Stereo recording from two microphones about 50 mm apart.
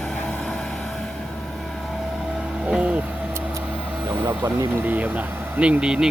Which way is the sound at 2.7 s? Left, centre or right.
Right.